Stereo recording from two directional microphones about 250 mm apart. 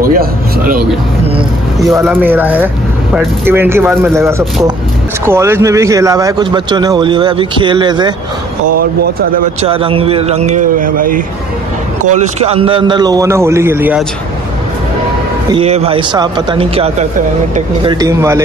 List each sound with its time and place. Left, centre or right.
0.0 s a sound: right
2.0 s speech: centre
9.6 s a man's voice: right
15.5 s a man's voice: right